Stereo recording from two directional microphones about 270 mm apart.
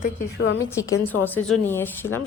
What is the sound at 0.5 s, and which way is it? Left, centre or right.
A woman's voice, centre.